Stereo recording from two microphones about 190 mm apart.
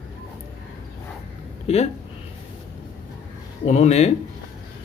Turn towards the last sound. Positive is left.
turn(degrees=35)  # may be behind; listen again after turning